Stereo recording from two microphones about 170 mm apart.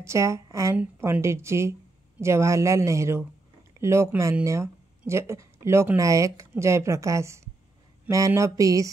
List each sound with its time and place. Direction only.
0.0 s a woman's voice: 15° right (ahead or behind)